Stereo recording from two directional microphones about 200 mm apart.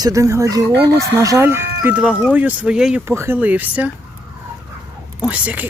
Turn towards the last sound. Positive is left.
turn(degrees=-5)  # may be behind; listen again after turning